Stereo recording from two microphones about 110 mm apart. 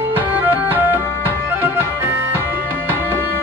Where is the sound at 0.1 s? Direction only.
15° right (ahead or behind).